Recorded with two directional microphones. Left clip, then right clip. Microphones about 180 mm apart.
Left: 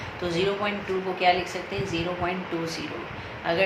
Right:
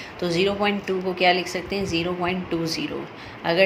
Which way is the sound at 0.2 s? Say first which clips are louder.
Right 4 dB; 50° right (ahead or behind).